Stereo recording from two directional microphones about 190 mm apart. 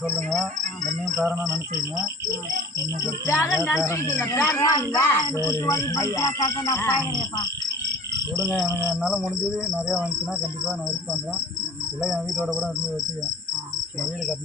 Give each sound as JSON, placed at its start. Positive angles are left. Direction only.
{"t": 1.2, "sound": "cricket", "side_deg": -10}
{"t": 3.2, "sound": "speech", "side_deg": 15}
{"t": 8.6, "sound": "speech", "side_deg": 15}
{"t": 9.0, "sound": "cricket", "side_deg": -5}
{"t": 12.0, "sound": "cricket", "side_deg": -5}